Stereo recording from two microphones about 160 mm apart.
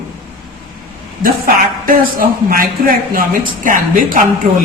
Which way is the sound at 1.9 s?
65° right (ahead or behind).